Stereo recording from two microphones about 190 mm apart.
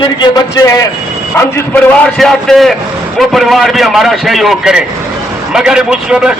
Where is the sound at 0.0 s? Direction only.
25° left (ahead or behind).